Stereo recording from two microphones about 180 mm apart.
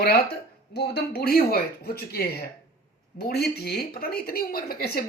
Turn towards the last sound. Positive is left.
turn(degrees=55)  # may be behind; listen again after turning